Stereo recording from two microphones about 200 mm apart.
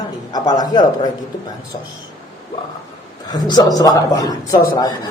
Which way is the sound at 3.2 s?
20° left (ahead or behind).